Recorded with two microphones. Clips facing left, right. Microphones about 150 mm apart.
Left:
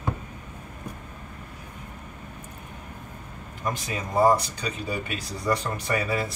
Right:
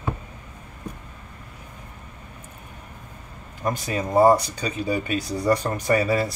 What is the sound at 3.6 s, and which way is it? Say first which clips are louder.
Speech: right 5 dB; 45° right (ahead or behind).